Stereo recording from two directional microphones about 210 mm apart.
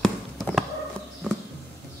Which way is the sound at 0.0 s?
Centre (ahead or behind).